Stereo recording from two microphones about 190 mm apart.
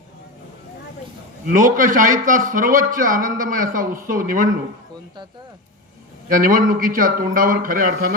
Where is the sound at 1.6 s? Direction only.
45° right (ahead or behind).